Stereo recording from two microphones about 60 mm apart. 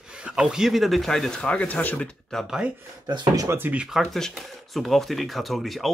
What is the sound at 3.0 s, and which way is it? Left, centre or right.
Speech, right.